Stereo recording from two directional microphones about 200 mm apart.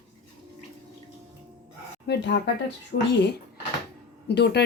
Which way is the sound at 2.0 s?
60° left (ahead or behind).